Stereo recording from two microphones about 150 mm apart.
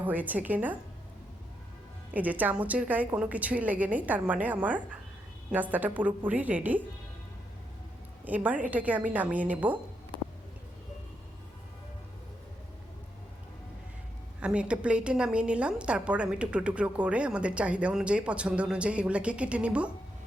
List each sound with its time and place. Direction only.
0.0 s a woman's voice: 10° right (ahead or behind)
2.1 s a woman's voice: 10° right (ahead or behind)
8.2 s a woman's voice: 10° right (ahead or behind)
14.4 s a woman's voice: 5° right (ahead or behind)